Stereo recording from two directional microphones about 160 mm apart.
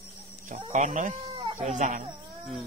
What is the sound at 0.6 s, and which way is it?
Speech, 50° right (ahead or behind).